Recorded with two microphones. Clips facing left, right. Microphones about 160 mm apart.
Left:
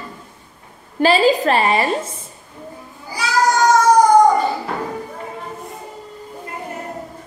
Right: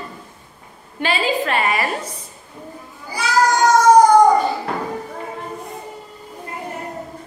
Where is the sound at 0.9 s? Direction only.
40° left (ahead or behind).